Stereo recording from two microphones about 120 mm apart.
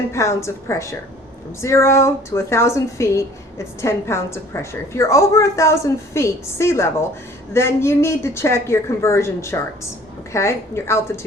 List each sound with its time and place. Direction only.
0.1 s speech: 25° left (ahead or behind)